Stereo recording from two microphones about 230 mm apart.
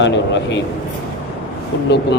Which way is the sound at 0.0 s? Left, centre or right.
Left.